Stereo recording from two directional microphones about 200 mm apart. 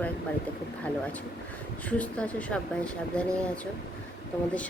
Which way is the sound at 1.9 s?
5° left (ahead or behind).